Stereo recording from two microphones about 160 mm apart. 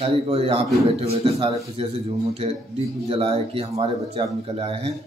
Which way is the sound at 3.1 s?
35° right (ahead or behind).